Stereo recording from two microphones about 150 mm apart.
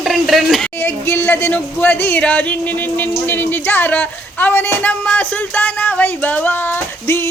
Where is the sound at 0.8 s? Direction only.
15° left (ahead or behind).